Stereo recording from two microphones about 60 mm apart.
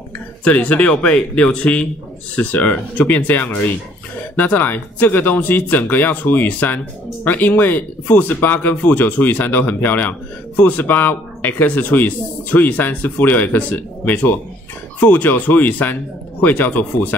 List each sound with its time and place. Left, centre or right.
0.4 s speech: left